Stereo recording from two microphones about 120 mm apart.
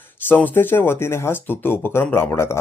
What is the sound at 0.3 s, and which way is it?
Speech, 15° left (ahead or behind).